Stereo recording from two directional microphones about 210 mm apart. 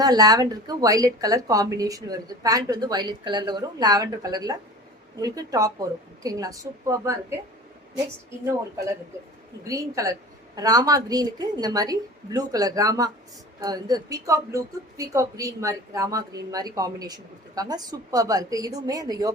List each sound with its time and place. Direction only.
0.0 s speech: 20° right (ahead or behind)
9.6 s speech: 15° right (ahead or behind)